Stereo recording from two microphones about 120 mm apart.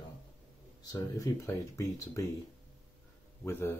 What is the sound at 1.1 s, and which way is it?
Speech, 25° left (ahead or behind).